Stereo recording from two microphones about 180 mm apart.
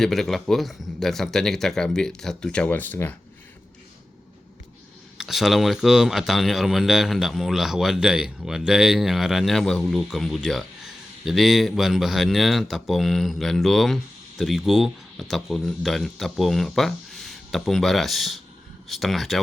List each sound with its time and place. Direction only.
0.0 s speech: centre (ahead or behind)
5.1 s speech: centre (ahead or behind)